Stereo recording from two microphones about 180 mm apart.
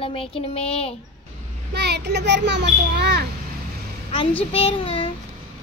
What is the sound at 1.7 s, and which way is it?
A child's voice, 70° right (ahead or behind).